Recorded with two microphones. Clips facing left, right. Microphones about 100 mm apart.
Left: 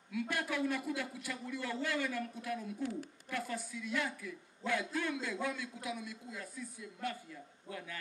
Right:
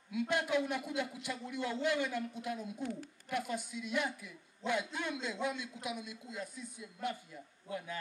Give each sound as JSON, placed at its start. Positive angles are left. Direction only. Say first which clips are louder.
{"t": 0.1, "sound": "a man's voice", "louder": "right 4 dB", "side_deg": -20}